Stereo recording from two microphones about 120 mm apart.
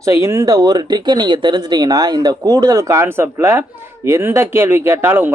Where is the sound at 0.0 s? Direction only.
25° right (ahead or behind).